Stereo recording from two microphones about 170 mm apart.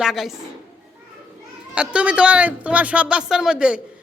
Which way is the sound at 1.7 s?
5° right (ahead or behind).